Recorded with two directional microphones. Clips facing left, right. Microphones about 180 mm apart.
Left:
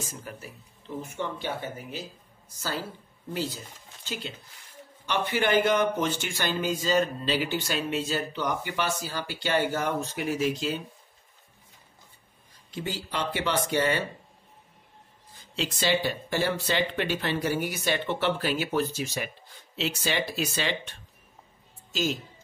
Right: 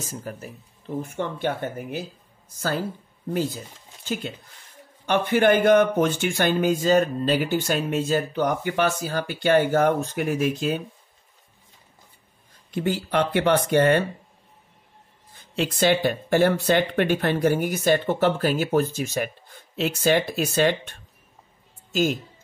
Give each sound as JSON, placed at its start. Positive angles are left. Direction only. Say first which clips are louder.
{"t": 0.0, "sound": "speech", "louder": "right 5 dB", "side_deg": -40}
{"t": 4.0, "sound": "speech", "louder": "right 7 dB", "side_deg": -50}
{"t": 12.7, "sound": "speech", "louder": "right 9 dB", "side_deg": -55}
{"t": 15.5, "sound": "speech", "louder": "right 6 dB", "side_deg": -55}